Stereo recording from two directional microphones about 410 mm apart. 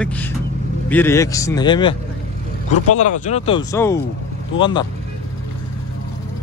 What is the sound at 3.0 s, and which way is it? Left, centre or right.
Speech, centre.